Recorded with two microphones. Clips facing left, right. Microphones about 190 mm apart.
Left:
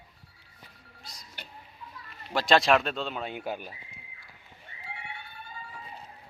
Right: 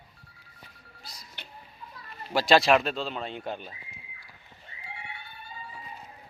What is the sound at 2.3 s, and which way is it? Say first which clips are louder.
Speech: right 2 dB; 5° right (ahead or behind).